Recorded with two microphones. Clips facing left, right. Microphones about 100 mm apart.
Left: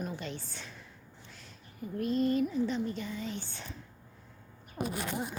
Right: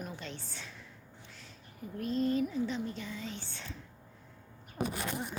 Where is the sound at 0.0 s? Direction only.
Centre (ahead or behind).